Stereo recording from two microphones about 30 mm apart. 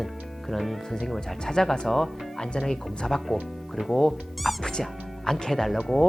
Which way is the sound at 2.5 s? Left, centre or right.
Left.